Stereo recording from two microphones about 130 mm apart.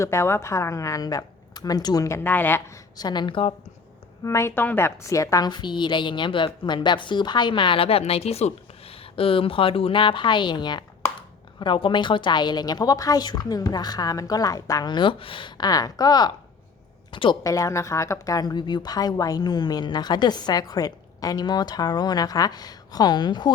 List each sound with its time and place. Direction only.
0.0 s a woman's voice: 20° left (ahead or behind)
3.0 s speech: 35° left (ahead or behind)
4.2 s speech: 25° left (ahead or behind); by 17.3 s 40° left (ahead or behind)
17.4 s speech: 25° left (ahead or behind)